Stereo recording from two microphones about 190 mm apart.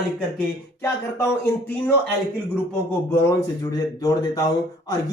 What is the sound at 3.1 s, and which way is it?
Speech, 20° left (ahead or behind).